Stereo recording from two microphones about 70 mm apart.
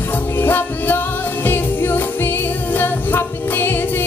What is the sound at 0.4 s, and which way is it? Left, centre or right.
Music, left.